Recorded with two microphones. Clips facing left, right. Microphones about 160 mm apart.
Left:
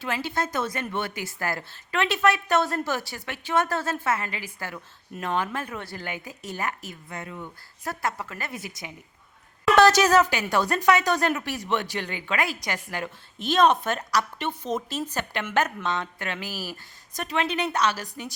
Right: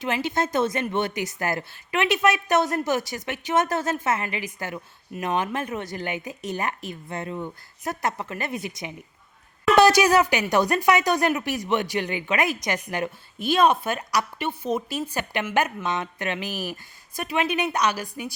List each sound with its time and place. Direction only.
0.0 s speech: 20° right (ahead or behind)